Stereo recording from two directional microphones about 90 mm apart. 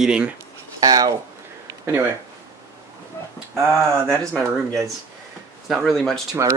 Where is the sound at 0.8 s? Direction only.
45° right (ahead or behind).